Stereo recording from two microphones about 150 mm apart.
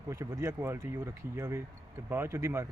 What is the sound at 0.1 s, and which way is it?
Speech, 20° right (ahead or behind).